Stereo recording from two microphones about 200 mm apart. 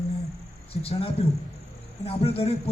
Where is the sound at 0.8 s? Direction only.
30° left (ahead or behind).